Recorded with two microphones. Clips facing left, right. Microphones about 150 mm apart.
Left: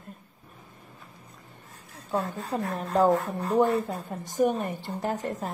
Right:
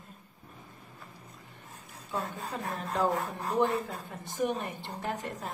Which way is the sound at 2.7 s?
40° left (ahead or behind).